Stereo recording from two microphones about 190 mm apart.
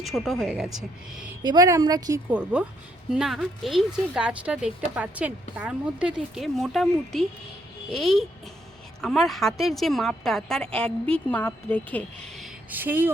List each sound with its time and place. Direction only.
0.0 s a woman's voice: centre (ahead or behind)
1.4 s a woman's voice: 20° right (ahead or behind)
2.3 s a woman's voice: 5° right (ahead or behind); by 12.0 s 10° left (ahead or behind)
12.4 s speech: 10° right (ahead or behind)